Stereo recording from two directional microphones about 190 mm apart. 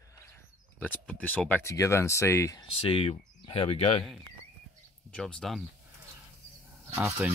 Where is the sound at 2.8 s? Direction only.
30° left (ahead or behind).